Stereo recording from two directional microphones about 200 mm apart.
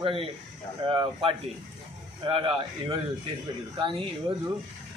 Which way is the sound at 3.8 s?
25° right (ahead or behind).